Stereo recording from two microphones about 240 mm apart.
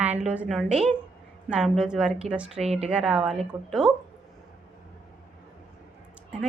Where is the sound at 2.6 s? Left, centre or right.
Right.